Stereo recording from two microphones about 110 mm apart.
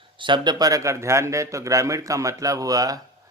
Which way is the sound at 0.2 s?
45° right (ahead or behind).